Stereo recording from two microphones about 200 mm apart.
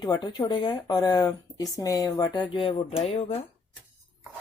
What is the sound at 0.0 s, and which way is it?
Speech, 20° left (ahead or behind).